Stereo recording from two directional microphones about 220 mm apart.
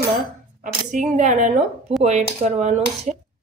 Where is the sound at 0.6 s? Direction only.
35° right (ahead or behind).